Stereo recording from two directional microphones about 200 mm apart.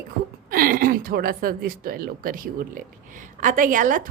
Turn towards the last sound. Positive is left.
turn(degrees=-40)  # may be behind; listen again after turning